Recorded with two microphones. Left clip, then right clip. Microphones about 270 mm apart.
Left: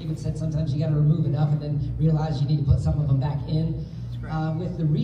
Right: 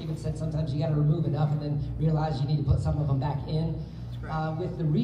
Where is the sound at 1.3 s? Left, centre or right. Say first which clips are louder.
Left 2 dB; right.